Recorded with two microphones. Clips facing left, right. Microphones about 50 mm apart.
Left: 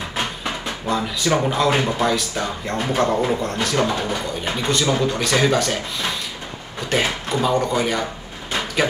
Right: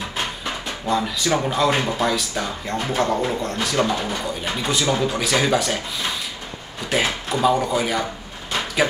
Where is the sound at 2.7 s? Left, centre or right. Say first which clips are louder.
Left 2 dB; centre.